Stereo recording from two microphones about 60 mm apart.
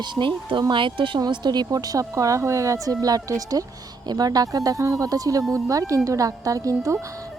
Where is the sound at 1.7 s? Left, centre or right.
Right.